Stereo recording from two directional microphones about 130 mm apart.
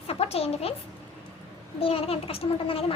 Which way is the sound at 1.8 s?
45° left (ahead or behind).